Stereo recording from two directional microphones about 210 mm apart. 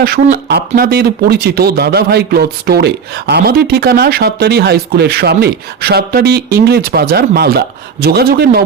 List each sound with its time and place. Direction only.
0.0 s speech: 45° right (ahead or behind)